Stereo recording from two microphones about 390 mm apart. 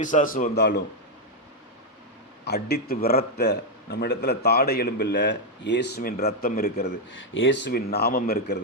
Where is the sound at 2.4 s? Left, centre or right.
Left.